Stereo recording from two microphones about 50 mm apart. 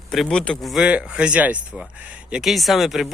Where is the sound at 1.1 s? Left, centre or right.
Right.